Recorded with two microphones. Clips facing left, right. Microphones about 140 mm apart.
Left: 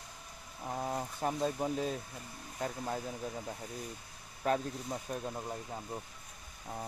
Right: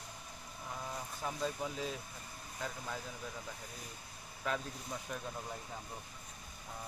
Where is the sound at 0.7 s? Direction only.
50° left (ahead or behind).